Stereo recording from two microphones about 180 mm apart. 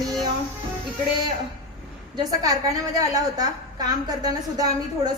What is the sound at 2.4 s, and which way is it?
A woman's voice, 20° right (ahead or behind).